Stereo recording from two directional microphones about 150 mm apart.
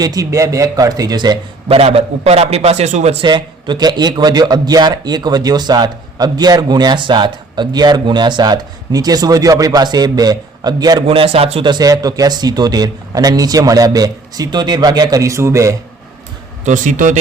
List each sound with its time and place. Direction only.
0.0 s a man's voice: 25° right (ahead or behind)
1.6 s a man's voice: 40° right (ahead or behind)
3.2 s a man's voice: 30° right (ahead or behind)
11.7 s a man's voice: 25° right (ahead or behind)
16.6 s a man's voice: 60° right (ahead or behind)